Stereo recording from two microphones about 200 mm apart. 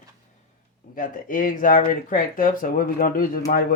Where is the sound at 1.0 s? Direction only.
40° left (ahead or behind).